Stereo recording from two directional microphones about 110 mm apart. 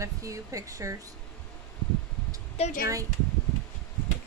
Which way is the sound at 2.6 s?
70° left (ahead or behind).